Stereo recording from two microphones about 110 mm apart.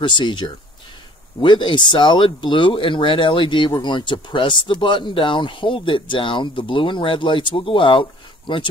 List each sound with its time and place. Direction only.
0.0 s speech: 45° left (ahead or behind)